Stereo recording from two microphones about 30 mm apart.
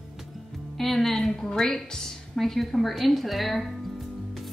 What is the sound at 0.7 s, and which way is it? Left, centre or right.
Speech, centre.